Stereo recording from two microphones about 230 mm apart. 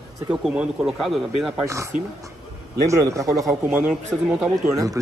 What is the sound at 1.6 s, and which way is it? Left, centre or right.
Speech, centre.